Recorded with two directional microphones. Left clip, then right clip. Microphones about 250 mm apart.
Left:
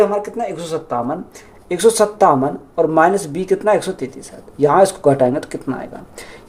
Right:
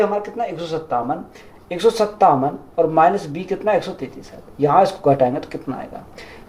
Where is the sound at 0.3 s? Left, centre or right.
Left.